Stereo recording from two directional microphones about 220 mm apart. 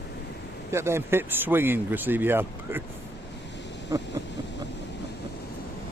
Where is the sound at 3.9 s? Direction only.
15° right (ahead or behind).